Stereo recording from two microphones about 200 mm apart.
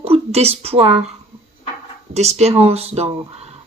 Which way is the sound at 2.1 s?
35° right (ahead or behind).